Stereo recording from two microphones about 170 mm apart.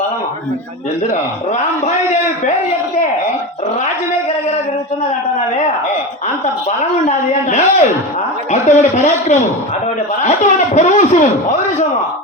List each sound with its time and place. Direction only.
6.4 s a man's voice: 45° left (ahead or behind)